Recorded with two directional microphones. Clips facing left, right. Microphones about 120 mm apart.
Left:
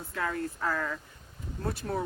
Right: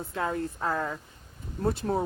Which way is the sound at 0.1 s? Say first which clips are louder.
Right 2 dB; 25° right (ahead or behind).